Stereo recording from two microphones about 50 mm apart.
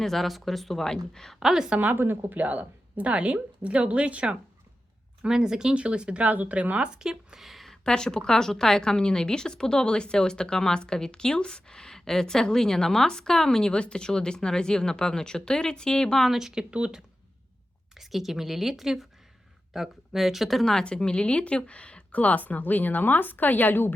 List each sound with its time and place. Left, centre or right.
0.0 s speech: centre
1.4 s speech: centre
1.8 s a woman's voice: right
2.4 s a woman's voice: right
5.3 s speech: centre
7.0 s a sound: centre
7.9 s speech: centre
16.3 s speech: centre
17.9 s speech: centre
20.8 s speech: centre; by 23.9 s left